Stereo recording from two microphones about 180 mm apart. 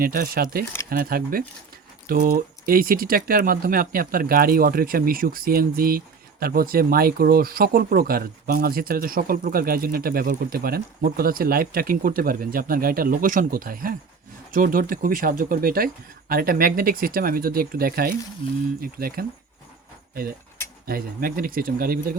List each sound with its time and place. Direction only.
0.0 s speech: 55° right (ahead or behind)
20.8 s speech: 55° right (ahead or behind)